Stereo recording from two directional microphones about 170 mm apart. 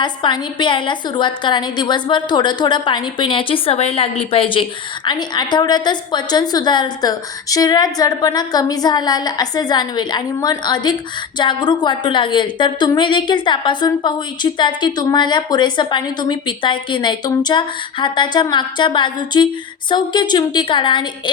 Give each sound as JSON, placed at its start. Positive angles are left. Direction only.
{"t": 0.0, "sound": "a woman's voice", "side_deg": 25}